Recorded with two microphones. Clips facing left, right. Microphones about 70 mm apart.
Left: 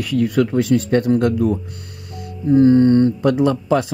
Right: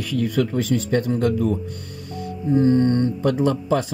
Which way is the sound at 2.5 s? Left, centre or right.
Left.